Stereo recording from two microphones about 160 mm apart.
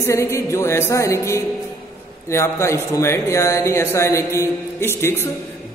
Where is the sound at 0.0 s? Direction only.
20° left (ahead or behind).